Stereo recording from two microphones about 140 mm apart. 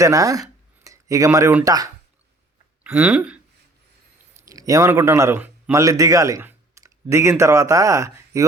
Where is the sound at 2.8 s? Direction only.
15° right (ahead or behind).